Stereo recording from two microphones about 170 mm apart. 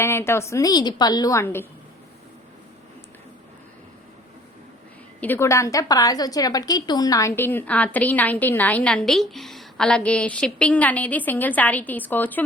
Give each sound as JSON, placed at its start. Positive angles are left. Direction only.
{"t": 0.0, "sound": "a woman's voice", "side_deg": 15}
{"t": 5.2, "sound": "a woman's voice", "side_deg": 15}